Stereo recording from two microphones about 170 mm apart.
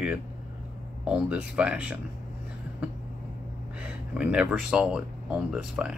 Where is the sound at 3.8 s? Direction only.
5° right (ahead or behind).